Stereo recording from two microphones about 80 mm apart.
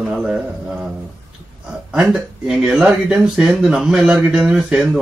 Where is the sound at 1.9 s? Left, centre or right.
Centre.